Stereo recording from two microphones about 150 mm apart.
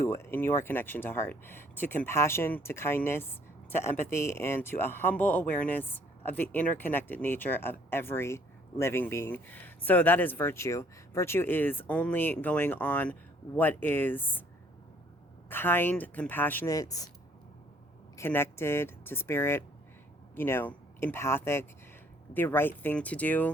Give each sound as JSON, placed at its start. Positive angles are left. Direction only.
{"t": 0.0, "sound": "speech", "side_deg": 15}
{"t": 15.4, "sound": "speech", "side_deg": 15}
{"t": 18.2, "sound": "speech", "side_deg": 15}